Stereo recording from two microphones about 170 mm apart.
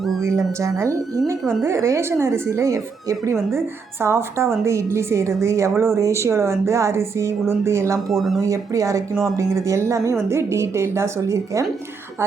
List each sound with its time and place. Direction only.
0.6 s a woman's voice: 15° right (ahead or behind)
8.1 s speech: centre (ahead or behind)
8.4 s a woman's voice: 20° right (ahead or behind)